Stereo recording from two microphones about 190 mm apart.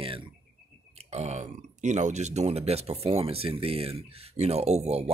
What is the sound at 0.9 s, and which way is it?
Speech, 35° right (ahead or behind).